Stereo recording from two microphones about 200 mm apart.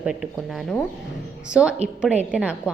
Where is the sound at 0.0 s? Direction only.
5° right (ahead or behind).